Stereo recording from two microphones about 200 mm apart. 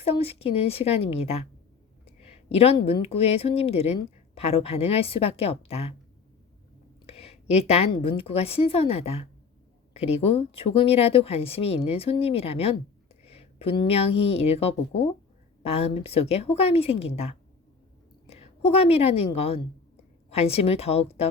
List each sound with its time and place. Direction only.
0.0 s a woman's voice: 30° left (ahead or behind)
7.1 s a sound: 30° left (ahead or behind)
8.0 s a woman's voice: 30° left (ahead or behind)